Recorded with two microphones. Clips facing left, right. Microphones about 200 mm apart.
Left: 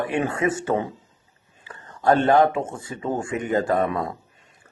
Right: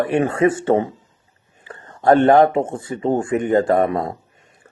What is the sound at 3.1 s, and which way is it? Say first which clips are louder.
Speech: right 6 dB; 55° right (ahead or behind).